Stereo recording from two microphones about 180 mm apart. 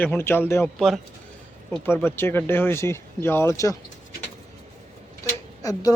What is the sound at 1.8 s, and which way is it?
Speech, 10° left (ahead or behind).